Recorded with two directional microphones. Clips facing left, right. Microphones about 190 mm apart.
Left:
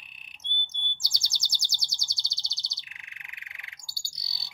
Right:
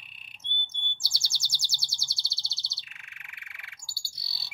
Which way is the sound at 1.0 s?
20° left (ahead or behind).